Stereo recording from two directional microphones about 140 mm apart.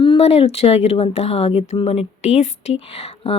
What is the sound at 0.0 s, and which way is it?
Speech, 45° left (ahead or behind).